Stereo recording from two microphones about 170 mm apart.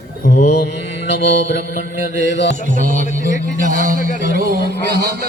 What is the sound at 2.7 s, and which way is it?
Speech, 50° right (ahead or behind).